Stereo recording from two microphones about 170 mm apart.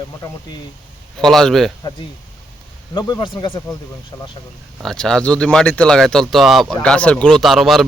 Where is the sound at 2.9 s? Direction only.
25° left (ahead or behind).